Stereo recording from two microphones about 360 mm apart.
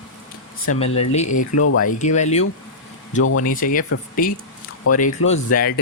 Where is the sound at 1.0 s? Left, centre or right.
Centre.